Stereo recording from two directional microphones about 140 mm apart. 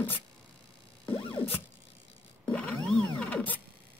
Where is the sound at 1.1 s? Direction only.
40° left (ahead or behind).